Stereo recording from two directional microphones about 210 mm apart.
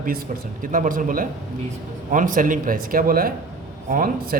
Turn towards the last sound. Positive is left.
turn(degrees=-40)  # may be behind; listen again after turning